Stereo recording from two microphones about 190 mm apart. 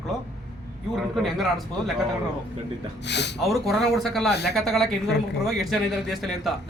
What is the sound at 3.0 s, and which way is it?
Speech, 65° left (ahead or behind).